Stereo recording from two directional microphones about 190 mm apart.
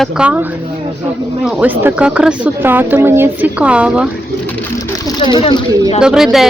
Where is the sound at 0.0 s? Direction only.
5° right (ahead or behind).